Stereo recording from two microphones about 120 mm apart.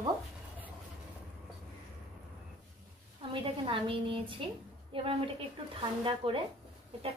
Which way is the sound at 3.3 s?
50° right (ahead or behind).